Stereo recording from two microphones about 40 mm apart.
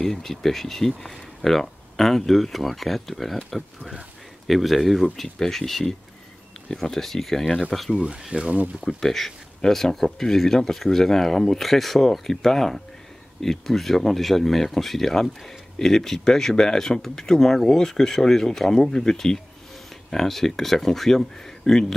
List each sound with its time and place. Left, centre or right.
0.0 s speech: centre
8.2 s speech: centre
8.8 s speech: centre